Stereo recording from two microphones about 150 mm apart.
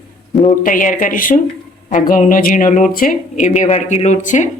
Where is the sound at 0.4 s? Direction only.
65° left (ahead or behind).